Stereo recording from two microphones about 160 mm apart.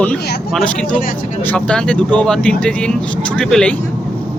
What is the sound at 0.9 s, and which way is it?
Speech, 60° left (ahead or behind).